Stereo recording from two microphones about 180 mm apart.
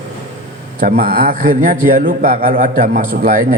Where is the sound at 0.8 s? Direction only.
55° right (ahead or behind).